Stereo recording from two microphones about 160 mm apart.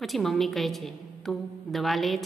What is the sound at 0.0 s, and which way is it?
A woman's voice, centre (ahead or behind).